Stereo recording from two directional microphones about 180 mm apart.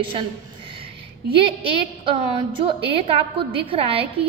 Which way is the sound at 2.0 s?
30° right (ahead or behind).